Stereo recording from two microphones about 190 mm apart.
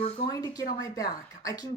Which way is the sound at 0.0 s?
25° left (ahead or behind).